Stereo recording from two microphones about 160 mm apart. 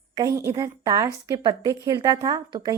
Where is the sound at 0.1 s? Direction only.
20° right (ahead or behind).